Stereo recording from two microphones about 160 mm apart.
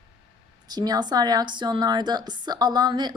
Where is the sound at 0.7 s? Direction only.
25° right (ahead or behind).